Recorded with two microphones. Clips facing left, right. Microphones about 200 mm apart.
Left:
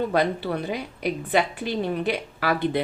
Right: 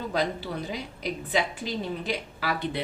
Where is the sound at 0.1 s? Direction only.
60° left (ahead or behind).